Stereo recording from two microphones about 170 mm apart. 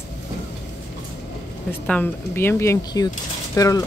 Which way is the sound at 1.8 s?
10° left (ahead or behind).